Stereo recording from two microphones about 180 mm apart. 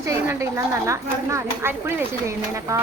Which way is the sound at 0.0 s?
15° right (ahead or behind).